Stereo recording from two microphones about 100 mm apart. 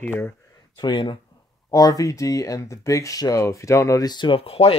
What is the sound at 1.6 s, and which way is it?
Speech, 40° left (ahead or behind).